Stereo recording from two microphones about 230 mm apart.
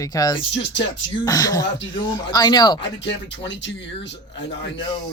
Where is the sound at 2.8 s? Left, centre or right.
Left.